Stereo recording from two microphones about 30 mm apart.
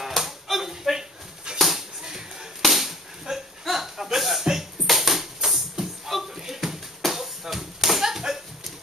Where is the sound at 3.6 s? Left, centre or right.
Centre.